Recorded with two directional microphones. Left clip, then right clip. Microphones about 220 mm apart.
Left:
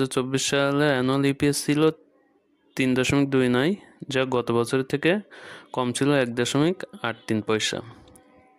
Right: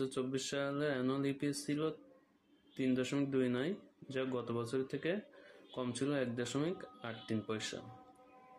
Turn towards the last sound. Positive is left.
turn(degrees=50)  # may be behind; listen again after turning